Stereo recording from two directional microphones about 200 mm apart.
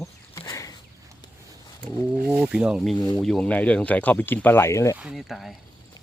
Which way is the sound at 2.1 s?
5° right (ahead or behind).